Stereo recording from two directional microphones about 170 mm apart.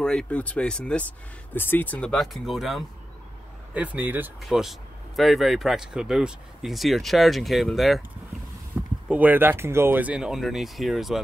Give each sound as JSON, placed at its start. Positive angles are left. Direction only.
{"t": 0.0, "sound": "speech", "side_deg": 5}
{"t": 8.8, "sound": "a sound", "side_deg": -5}
{"t": 9.1, "sound": "speech", "side_deg": -10}